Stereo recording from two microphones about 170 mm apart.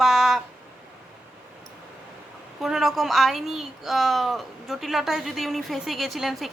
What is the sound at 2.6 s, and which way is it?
Speech, centre (ahead or behind).